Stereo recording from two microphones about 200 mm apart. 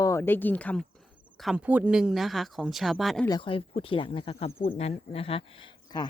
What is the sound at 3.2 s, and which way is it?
Speech, 25° left (ahead or behind).